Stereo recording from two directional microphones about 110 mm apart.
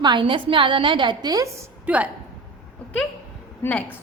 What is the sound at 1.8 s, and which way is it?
Speech, 15° right (ahead or behind).